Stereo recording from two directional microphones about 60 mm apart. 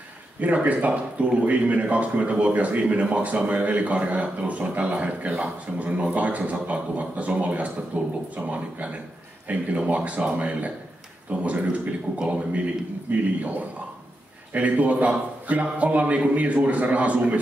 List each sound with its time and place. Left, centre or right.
0.4 s a man's voice: right